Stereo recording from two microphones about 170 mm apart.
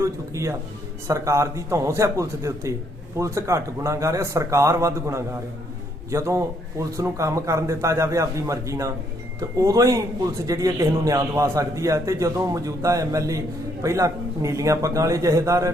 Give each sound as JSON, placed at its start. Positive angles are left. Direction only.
{"t": 0.0, "sound": "a man's voice", "side_deg": -15}